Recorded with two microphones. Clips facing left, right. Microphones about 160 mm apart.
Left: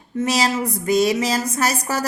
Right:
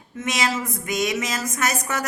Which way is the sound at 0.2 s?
35° left (ahead or behind).